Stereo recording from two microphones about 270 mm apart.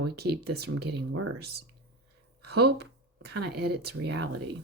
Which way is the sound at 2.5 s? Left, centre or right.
Right.